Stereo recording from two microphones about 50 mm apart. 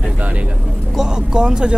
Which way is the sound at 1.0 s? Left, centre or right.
Centre.